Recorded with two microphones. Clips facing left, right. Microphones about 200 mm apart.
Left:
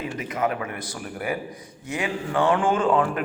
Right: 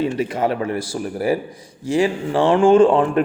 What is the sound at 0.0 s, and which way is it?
A man's voice, 30° right (ahead or behind).